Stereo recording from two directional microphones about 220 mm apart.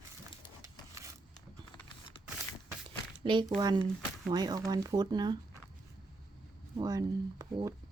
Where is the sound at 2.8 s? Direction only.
20° right (ahead or behind).